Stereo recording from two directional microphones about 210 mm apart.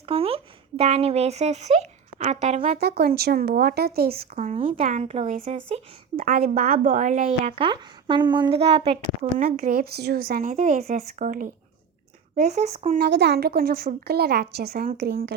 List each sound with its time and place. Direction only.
0.1 s speech: 25° right (ahead or behind)
2.7 s a woman's voice: 50° right (ahead or behind)
4.1 s speech: 30° right (ahead or behind)
6.2 s a woman's voice: 45° right (ahead or behind); by 9.0 s 25° right (ahead or behind)
9.6 s speech: 45° right (ahead or behind)
13.0 s a woman's voice: 50° right (ahead or behind)